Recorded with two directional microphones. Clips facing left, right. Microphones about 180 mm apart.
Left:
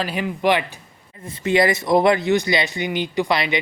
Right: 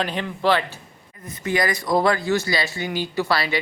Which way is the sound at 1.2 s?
25° left (ahead or behind).